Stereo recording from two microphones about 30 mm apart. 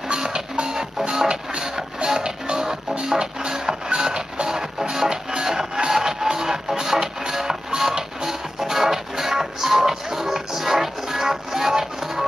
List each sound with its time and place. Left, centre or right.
0.1 s music: right
4.5 s music: centre